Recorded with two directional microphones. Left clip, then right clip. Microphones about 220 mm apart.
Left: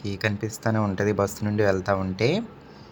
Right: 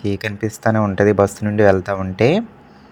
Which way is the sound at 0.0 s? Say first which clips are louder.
Right 6 dB; 25° right (ahead or behind).